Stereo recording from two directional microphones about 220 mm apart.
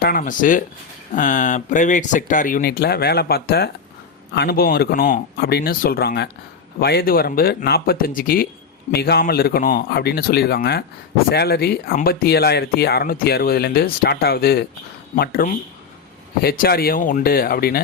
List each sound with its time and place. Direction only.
0.0 s speech: 40° left (ahead or behind)